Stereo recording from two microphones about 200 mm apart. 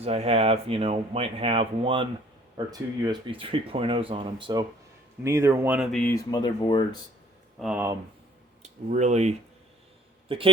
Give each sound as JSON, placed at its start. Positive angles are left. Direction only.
{"t": 0.0, "sound": "speech", "side_deg": -30}
{"t": 6.3, "sound": "speech", "side_deg": 20}
{"t": 7.6, "sound": "speech", "side_deg": -5}
{"t": 8.6, "sound": "a man's voice", "side_deg": -35}